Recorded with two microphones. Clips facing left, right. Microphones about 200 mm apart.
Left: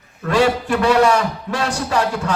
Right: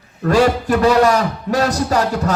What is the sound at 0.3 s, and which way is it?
A man's voice, 40° right (ahead or behind).